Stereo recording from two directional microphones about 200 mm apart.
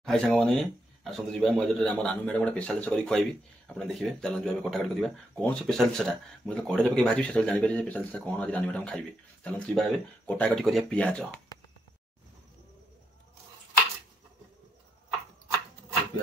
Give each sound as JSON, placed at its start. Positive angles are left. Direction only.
{"t": 0.0, "sound": "speech", "side_deg": 0}